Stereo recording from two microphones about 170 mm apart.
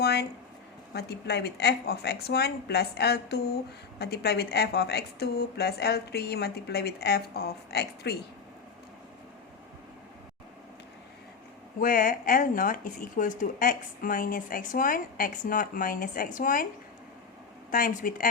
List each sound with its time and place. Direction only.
0.0 s a sound: 75° left (ahead or behind)
0.9 s a woman's voice: 75° left (ahead or behind)
11.8 s speech: 55° left (ahead or behind)
17.7 s speech: 55° left (ahead or behind)